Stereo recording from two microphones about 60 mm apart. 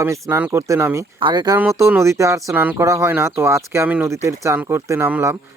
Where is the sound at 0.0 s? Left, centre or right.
Right.